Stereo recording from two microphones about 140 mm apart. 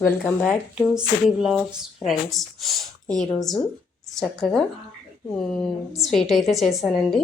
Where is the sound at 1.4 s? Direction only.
5° right (ahead or behind).